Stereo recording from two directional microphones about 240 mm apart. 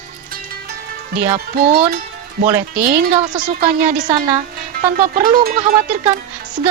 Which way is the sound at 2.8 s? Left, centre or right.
Right.